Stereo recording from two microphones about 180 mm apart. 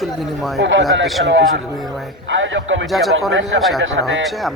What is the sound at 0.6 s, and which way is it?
Speech, 90° right.